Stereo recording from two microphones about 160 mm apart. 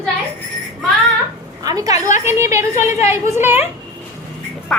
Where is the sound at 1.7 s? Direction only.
20° right (ahead or behind).